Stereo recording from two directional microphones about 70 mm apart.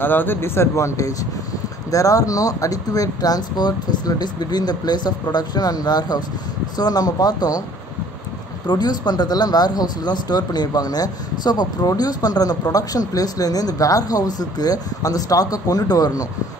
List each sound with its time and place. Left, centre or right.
0.0 s speech: left
8.6 s speech: left